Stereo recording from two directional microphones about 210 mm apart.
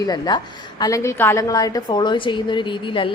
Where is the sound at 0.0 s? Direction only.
20° left (ahead or behind).